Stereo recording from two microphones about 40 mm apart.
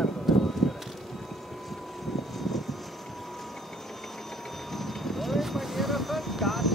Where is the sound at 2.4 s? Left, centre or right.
Centre.